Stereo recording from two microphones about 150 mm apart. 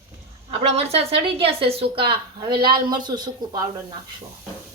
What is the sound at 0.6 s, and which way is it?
Speech, 45° right (ahead or behind).